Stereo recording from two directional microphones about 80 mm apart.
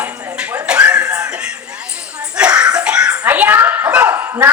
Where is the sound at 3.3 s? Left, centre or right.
Right.